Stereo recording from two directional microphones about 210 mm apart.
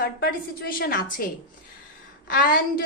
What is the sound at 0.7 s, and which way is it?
Speech, 45° left (ahead or behind).